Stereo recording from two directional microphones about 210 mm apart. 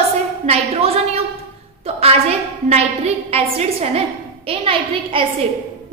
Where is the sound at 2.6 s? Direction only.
30° right (ahead or behind).